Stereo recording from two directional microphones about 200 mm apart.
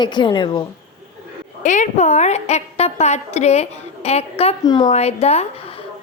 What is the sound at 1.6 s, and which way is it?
A woman's voice, 35° left (ahead or behind).